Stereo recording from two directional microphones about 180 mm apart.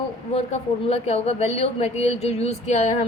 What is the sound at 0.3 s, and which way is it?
A woman's voice, 35° left (ahead or behind).